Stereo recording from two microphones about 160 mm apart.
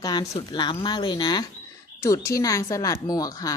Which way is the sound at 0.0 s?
25° left (ahead or behind).